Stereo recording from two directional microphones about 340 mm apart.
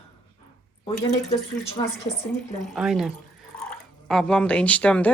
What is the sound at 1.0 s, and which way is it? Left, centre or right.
Speech, left.